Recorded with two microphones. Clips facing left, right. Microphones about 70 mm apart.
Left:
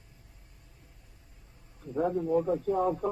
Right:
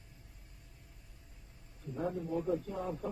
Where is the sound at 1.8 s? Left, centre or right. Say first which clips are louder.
Left 8 dB; left.